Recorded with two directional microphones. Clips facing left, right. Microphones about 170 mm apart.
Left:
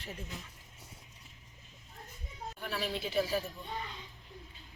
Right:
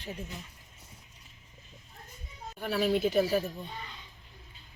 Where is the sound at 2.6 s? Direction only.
45° right (ahead or behind).